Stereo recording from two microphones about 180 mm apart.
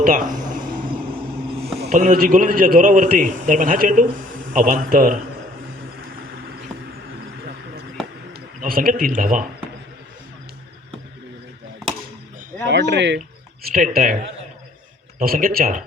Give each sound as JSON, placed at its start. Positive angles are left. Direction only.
{"t": 0.0, "sound": "a sound", "side_deg": -45}
{"t": 1.9, "sound": "a man's voice", "side_deg": -45}
{"t": 6.0, "sound": "vehicle", "side_deg": -55}
{"t": 8.3, "sound": "a man's voice", "side_deg": -55}
{"t": 12.6, "sound": "speech", "side_deg": -70}
{"t": 13.7, "sound": "a man's voice", "side_deg": -50}
{"t": 15.2, "sound": "a man's voice", "side_deg": -50}